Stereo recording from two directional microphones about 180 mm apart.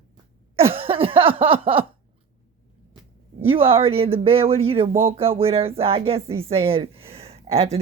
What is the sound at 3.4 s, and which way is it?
Speech, 30° right (ahead or behind).